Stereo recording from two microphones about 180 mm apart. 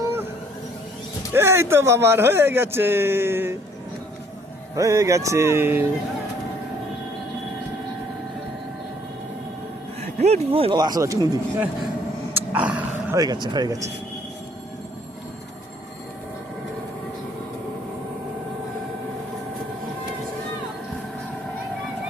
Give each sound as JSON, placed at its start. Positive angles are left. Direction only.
{"t": 1.3, "sound": "speech", "side_deg": -15}
{"t": 4.7, "sound": "speech", "side_deg": -15}
{"t": 10.2, "sound": "speech", "side_deg": -35}
{"t": 12.3, "sound": "a sound", "side_deg": -10}
{"t": 13.1, "sound": "speech", "side_deg": -20}